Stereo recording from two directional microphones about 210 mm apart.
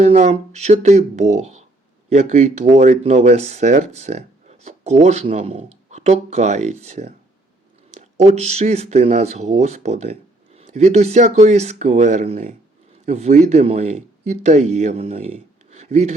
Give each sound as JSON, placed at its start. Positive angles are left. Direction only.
{"t": 0.0, "sound": "speech", "side_deg": -35}